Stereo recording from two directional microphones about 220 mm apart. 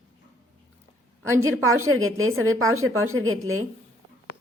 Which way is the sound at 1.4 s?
70° right (ahead or behind).